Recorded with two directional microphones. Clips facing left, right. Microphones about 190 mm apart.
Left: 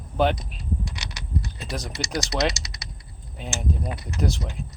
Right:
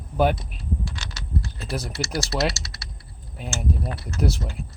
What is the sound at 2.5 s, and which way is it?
Speech, 20° left (ahead or behind).